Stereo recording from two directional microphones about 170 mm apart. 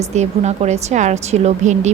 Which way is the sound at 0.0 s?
40° right (ahead or behind).